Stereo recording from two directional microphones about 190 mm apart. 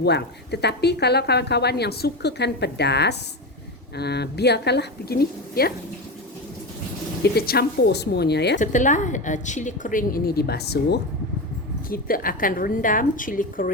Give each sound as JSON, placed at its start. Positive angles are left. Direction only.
{"t": 0.0, "sound": "speech", "side_deg": 60}
{"t": 7.3, "sound": "speech", "side_deg": 55}
{"t": 8.5, "sound": "a woman's voice", "side_deg": 40}
{"t": 11.9, "sound": "a woman's voice", "side_deg": 50}